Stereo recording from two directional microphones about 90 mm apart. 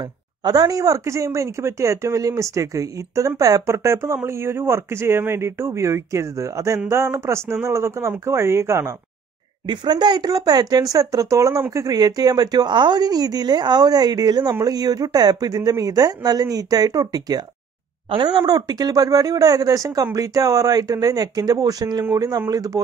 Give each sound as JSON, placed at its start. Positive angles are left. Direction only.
{"t": 0.4, "sound": "speech", "side_deg": -45}
{"t": 9.7, "sound": "speech", "side_deg": -55}